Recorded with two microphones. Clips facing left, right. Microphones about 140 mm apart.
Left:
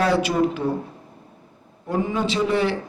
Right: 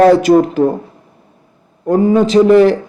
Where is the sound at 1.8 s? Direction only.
45° right (ahead or behind).